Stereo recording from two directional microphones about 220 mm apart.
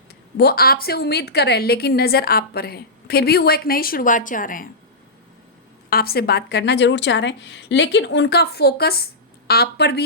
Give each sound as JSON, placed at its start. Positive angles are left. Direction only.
{"t": 0.3, "sound": "a woman's voice", "side_deg": 45}
{"t": 5.9, "sound": "a woman's voice", "side_deg": 45}